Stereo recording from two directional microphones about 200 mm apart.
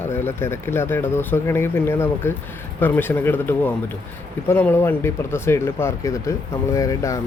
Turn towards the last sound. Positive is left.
turn(degrees=15)  # may be behind; listen again after turning